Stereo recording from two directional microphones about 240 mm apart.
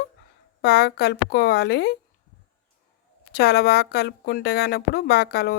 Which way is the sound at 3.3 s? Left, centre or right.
Left.